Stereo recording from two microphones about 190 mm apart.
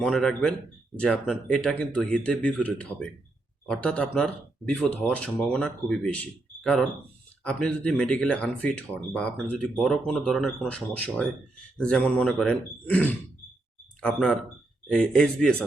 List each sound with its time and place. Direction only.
0.0 s speech: centre (ahead or behind)